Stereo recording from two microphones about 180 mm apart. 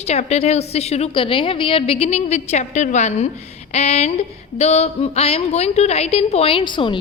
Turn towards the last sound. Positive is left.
turn(degrees=25)  # may be behind; listen again after turning